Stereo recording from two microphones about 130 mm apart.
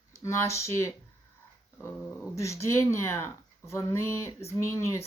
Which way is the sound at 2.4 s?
25° left (ahead or behind).